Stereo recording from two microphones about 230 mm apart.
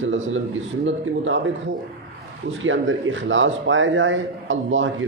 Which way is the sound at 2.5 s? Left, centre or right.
Right.